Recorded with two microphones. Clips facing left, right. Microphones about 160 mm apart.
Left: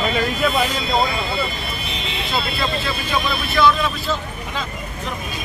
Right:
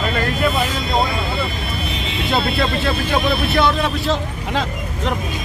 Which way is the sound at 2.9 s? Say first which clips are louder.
Right 4 dB; 60° right (ahead or behind).